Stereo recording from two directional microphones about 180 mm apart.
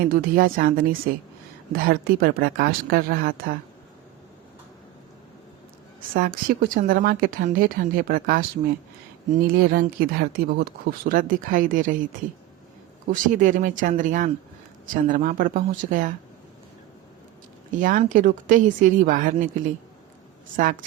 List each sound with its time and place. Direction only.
0.1 s speech: 55° right (ahead or behind)
6.1 s speech: 55° right (ahead or behind)
13.1 s speech: 45° right (ahead or behind)
17.7 s speech: 50° right (ahead or behind)